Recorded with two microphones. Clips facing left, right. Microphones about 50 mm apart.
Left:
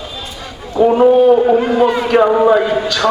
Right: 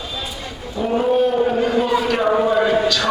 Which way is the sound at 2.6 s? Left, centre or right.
Centre.